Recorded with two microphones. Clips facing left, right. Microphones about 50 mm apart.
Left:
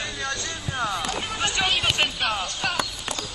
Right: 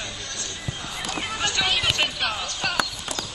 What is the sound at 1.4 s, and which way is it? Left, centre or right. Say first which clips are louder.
Run: left 1 dB; centre.